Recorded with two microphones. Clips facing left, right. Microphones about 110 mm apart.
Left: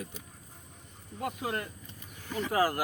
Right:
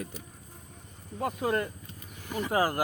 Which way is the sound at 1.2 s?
40° right (ahead or behind).